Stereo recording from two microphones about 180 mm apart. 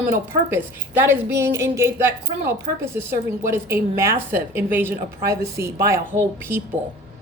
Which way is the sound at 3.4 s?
15° right (ahead or behind).